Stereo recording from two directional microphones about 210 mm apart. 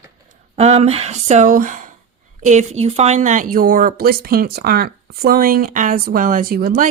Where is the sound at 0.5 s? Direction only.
30° right (ahead or behind).